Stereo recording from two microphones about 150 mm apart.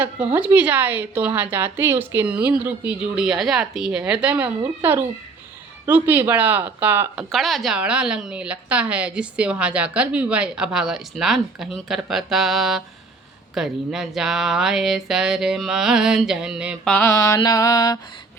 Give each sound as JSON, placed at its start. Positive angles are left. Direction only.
{"t": 0.0, "sound": "a woman's voice", "side_deg": -10}
{"t": 7.3, "sound": "a woman's voice", "side_deg": 0}
{"t": 16.9, "sound": "mantra", "side_deg": 15}